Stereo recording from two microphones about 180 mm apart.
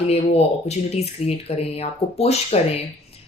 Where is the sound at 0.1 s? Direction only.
35° left (ahead or behind).